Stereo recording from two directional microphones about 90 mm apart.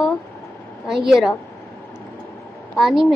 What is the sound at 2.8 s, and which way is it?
Speech, 5° right (ahead or behind).